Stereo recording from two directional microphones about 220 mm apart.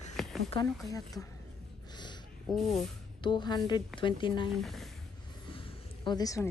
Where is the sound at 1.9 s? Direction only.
20° left (ahead or behind).